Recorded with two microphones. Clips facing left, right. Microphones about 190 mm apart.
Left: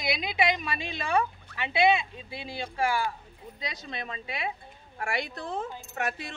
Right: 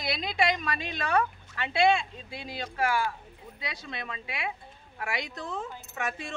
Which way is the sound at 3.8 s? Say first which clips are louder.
Left 1 dB; 35° left (ahead or behind).